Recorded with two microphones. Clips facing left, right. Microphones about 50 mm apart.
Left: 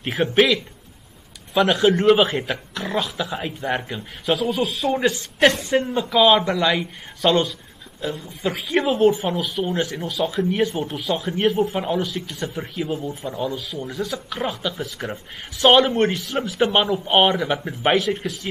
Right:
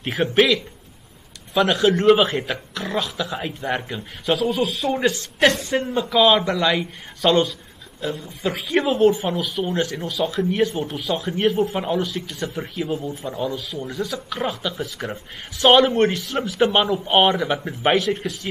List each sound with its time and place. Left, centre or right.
0.0 s a man's voice: centre
1.5 s speech: centre
1.8 s speech: centre
2.0 s a man's voice: centre
5.8 s speech: centre
6.0 s a man's voice: centre
12.9 s speech: left
13.4 s a man's voice: centre